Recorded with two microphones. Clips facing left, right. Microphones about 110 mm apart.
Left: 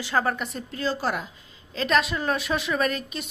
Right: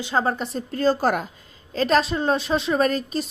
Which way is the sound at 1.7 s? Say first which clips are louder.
Right 4 dB; 35° right (ahead or behind).